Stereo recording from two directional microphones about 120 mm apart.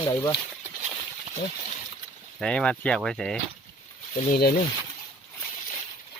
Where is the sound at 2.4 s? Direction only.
5° left (ahead or behind).